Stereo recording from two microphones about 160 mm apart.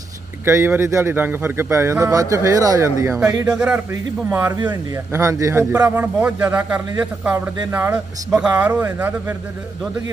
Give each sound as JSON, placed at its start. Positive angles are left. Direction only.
{"t": 0.4, "sound": "speech", "side_deg": -15}
{"t": 3.4, "sound": "speech", "side_deg": -5}